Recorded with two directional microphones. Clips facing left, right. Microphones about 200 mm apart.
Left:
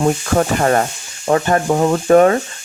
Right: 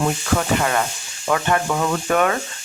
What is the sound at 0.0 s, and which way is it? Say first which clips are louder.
Speech: left 5 dB; 40° left (ahead or behind).